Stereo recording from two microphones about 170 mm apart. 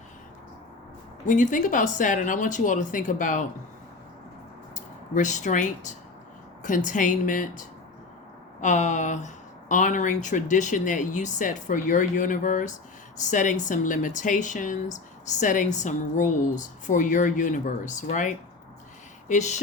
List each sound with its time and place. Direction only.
1.3 s speech: 50° left (ahead or behind)
4.7 s speech: 45° left (ahead or behind)